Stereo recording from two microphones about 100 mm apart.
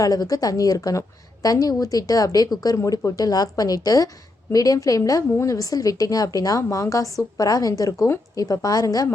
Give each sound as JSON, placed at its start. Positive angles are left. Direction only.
{"t": 0.0, "sound": "a woman's voice", "side_deg": 40}